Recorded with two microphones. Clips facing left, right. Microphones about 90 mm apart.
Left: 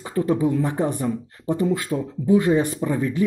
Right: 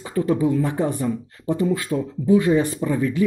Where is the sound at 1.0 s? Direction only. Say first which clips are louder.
Right 1 dB; 30° left (ahead or behind).